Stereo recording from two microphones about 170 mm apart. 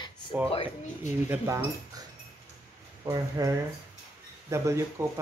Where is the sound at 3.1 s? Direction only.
20° right (ahead or behind).